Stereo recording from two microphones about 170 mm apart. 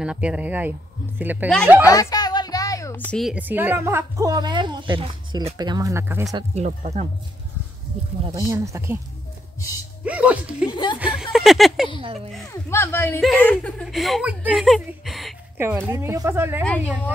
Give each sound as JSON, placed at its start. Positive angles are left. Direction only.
{"t": 0.0, "sound": "speech", "side_deg": -5}
{"t": 1.9, "sound": "music", "side_deg": 20}
{"t": 3.2, "sound": "a woman's voice", "side_deg": -5}
{"t": 6.5, "sound": "speech", "side_deg": -40}
{"t": 8.4, "sound": "speech", "side_deg": -20}
{"t": 9.6, "sound": "speech", "side_deg": 20}
{"t": 10.0, "sound": "speech", "side_deg": -10}
{"t": 10.7, "sound": "speech", "side_deg": 25}
{"t": 11.0, "sound": "speech", "side_deg": -5}
{"t": 11.3, "sound": "a sound", "side_deg": 0}
{"t": 12.0, "sound": "speech", "side_deg": -35}
{"t": 12.6, "sound": "speech", "side_deg": 15}
{"t": 15.6, "sound": "speech", "side_deg": -15}
{"t": 16.6, "sound": "speech", "side_deg": 5}